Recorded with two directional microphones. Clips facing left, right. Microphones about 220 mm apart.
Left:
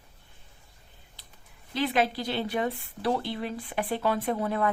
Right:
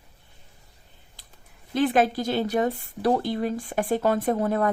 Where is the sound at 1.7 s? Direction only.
50° right (ahead or behind).